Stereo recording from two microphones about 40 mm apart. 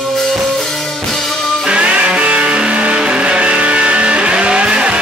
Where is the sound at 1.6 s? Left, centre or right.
Right.